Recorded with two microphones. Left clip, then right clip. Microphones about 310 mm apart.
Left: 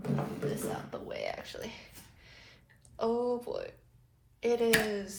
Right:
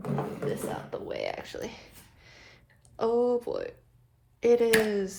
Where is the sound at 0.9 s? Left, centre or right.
Right.